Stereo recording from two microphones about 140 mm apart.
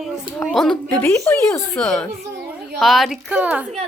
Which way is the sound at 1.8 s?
5° left (ahead or behind).